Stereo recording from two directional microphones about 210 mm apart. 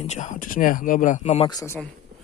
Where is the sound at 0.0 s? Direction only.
35° left (ahead or behind).